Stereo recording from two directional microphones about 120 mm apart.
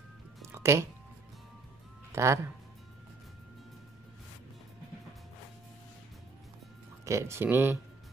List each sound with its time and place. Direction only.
0.5 s a sound: 25° right (ahead or behind)
2.1 s speech: 25° right (ahead or behind)
7.1 s speech: 25° right (ahead or behind)